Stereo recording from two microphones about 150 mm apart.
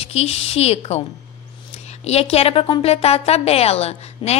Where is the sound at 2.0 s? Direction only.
45° left (ahead or behind).